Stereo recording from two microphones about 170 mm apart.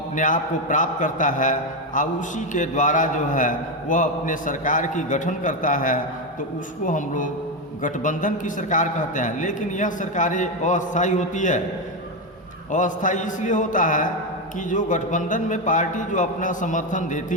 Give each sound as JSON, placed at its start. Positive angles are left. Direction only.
{"t": 0.2, "sound": "a man's voice", "side_deg": 50}
{"t": 12.7, "sound": "a man's voice", "side_deg": 50}